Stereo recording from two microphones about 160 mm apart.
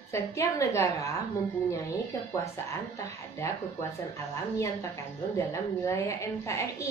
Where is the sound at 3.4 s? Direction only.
20° left (ahead or behind).